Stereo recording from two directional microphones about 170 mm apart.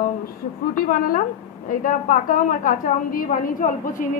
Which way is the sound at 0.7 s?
55° left (ahead or behind).